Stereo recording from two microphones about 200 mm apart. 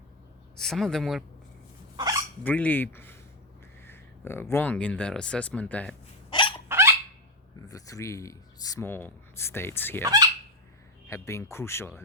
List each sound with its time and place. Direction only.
0.5 s speech: centre (ahead or behind)
2.4 s speech: 10° left (ahead or behind)
6.3 s hiccup: 25° left (ahead or behind)
6.7 s fowl: 15° right (ahead or behind)
7.7 s speech: 15° left (ahead or behind)
10.0 s speech: 20° right (ahead or behind)
11.1 s speech: 15° left (ahead or behind)